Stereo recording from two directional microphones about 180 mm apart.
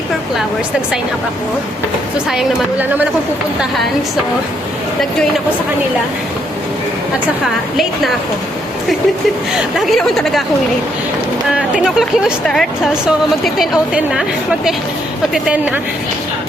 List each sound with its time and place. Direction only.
2.1 s speech: 5° right (ahead or behind)
9.7 s speech: centre (ahead or behind)
11.5 s speech: 5° right (ahead or behind)